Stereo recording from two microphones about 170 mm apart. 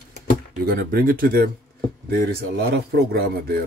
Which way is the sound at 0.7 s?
60° right (ahead or behind).